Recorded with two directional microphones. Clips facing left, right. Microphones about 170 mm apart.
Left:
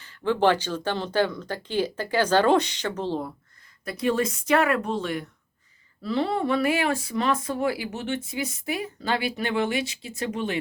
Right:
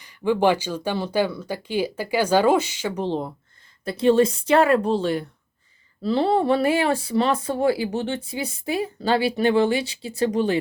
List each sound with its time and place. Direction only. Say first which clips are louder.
0.0 s a woman's voice: right 2 dB; 15° right (ahead or behind); by 10.6 s 35° right (ahead or behind)